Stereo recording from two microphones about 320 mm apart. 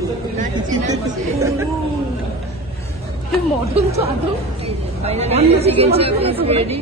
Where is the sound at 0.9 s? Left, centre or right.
Centre.